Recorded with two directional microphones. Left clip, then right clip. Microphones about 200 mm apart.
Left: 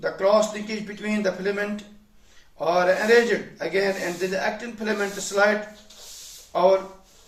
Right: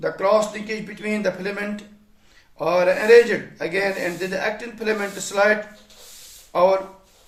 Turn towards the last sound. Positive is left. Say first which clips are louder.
# right 2 dB
turn(degrees=-40)  # may be behind; listen again after turning